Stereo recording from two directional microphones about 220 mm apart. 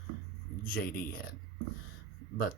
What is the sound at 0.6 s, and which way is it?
Speech, 40° left (ahead or behind).